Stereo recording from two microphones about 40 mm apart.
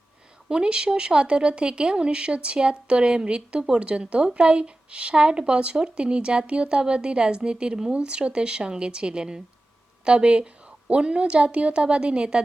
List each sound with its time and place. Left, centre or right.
0.4 s a woman's voice: right